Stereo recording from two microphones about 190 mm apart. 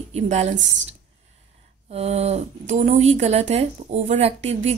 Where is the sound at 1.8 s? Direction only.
35° right (ahead or behind).